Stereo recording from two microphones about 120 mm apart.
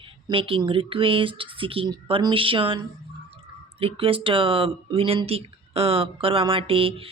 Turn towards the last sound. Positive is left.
turn(degrees=-50)  # may be behind; listen again after turning